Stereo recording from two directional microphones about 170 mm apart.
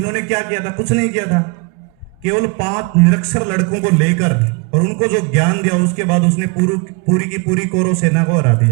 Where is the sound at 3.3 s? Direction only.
30° right (ahead or behind).